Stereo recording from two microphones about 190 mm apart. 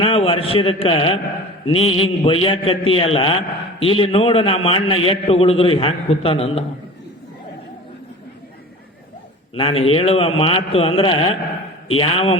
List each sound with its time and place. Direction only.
0.0 s a man's voice: 30° left (ahead or behind)
9.6 s a man's voice: 30° left (ahead or behind)